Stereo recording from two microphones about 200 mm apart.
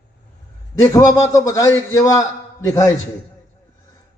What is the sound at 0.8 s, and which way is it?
Speech, 15° left (ahead or behind).